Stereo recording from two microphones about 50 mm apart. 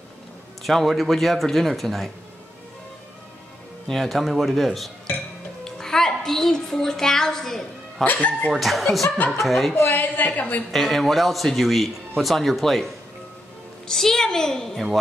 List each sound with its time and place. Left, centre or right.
0.7 s speech: centre
3.8 s speech: centre
5.6 s music: centre
8.1 s a woman's voice: left
8.5 s speech: centre
9.9 s a woman's voice: left
10.7 s a woman's voice: centre